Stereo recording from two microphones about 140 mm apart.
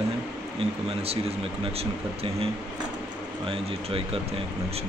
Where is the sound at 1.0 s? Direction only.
45° right (ahead or behind).